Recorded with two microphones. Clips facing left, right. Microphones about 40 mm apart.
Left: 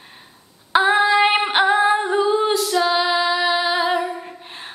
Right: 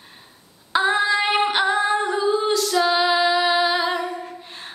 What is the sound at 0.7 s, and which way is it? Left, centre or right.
Female singing, left.